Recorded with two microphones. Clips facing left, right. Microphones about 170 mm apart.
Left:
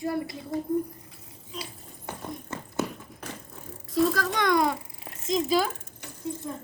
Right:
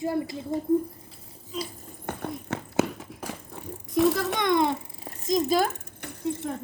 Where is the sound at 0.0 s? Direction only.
25° right (ahead or behind).